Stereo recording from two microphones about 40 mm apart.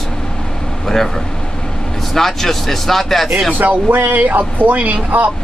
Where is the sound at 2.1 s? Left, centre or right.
Centre.